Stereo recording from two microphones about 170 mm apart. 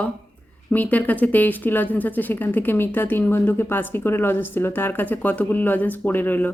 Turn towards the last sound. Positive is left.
turn(degrees=10)  # may be behind; listen again after turning